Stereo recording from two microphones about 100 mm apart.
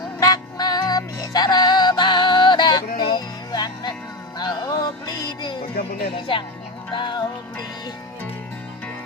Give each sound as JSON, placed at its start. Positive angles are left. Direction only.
{"t": 0.2, "sound": "music", "side_deg": 40}
{"t": 6.1, "sound": "speech", "side_deg": 55}
{"t": 6.9, "sound": "music", "side_deg": 50}